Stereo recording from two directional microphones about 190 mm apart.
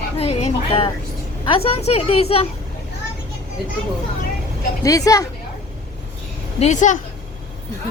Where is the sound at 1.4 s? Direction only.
30° left (ahead or behind).